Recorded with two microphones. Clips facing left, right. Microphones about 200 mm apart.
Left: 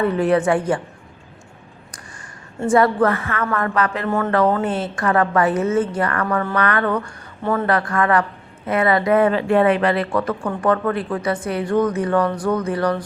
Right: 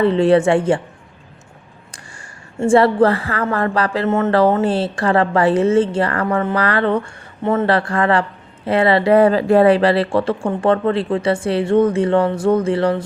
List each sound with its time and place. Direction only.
0.0 s a woman's voice: 30° right (ahead or behind)
2.6 s a woman's voice: 30° right (ahead or behind)